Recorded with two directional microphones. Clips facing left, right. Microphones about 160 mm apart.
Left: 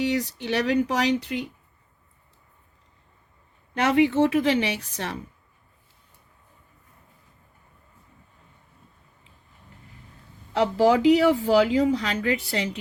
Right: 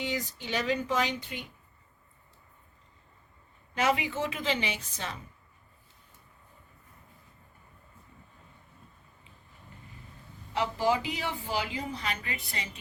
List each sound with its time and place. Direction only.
0.0 s speech: 75° left (ahead or behind); by 1.5 s 90° left
3.8 s a woman's voice: 65° left (ahead or behind)
10.6 s speech: 90° left